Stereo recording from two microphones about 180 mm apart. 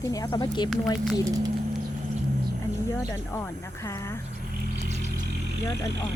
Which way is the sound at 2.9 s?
15° left (ahead or behind).